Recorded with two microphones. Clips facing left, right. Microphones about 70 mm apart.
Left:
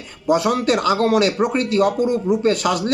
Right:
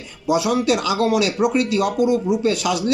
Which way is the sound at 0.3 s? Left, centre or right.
Left.